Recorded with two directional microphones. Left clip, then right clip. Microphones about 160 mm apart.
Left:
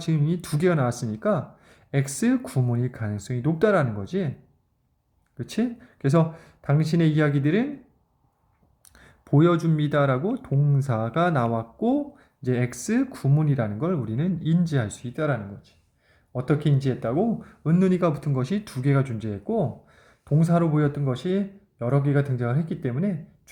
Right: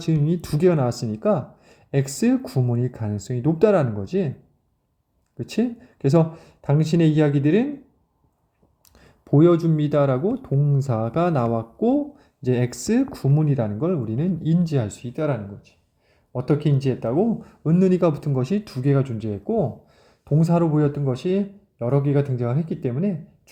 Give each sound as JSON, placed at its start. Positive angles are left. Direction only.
{"t": 0.0, "sound": "speech", "side_deg": -20}
{"t": 5.4, "sound": "speech", "side_deg": -20}
{"t": 8.9, "sound": "speech", "side_deg": -15}
{"t": 12.4, "sound": "speech", "side_deg": -25}